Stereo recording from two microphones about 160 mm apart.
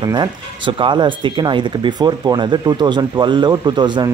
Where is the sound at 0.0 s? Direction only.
25° right (ahead or behind).